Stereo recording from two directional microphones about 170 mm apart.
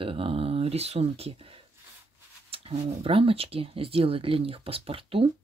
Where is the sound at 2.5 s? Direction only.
35° right (ahead or behind).